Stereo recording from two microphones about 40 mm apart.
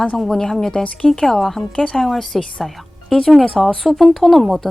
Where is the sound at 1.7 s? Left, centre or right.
Centre.